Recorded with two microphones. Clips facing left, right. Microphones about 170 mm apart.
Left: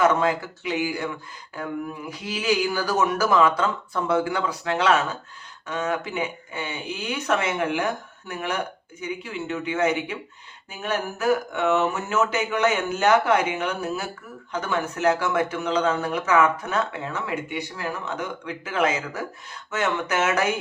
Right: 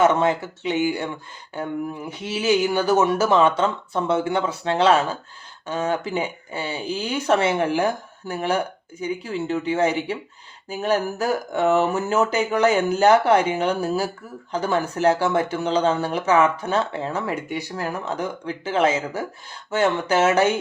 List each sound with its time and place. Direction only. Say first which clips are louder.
0.0 s speech: right 2 dB; 25° right (ahead or behind)